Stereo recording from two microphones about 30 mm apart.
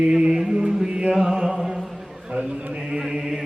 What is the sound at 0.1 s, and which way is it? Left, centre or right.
Chant, right.